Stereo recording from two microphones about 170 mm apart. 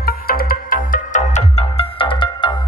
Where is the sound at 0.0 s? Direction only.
60° left (ahead or behind).